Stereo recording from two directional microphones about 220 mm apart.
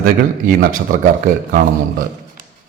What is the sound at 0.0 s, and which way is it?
Speech, 40° right (ahead or behind).